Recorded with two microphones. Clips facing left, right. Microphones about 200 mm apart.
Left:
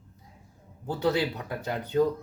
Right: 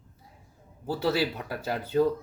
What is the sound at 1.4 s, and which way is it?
Speech, 5° right (ahead or behind).